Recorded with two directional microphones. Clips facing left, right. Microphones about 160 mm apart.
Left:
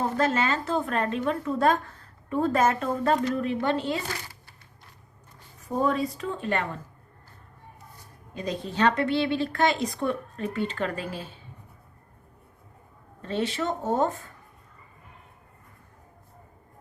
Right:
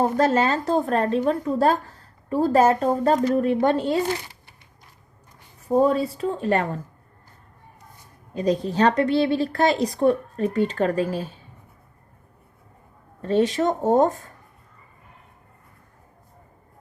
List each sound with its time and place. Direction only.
0.0 s a woman's voice: 40° right (ahead or behind)
5.6 s a woman's voice: 30° right (ahead or behind)
8.3 s a woman's voice: 40° right (ahead or behind)
13.2 s speech: 40° right (ahead or behind)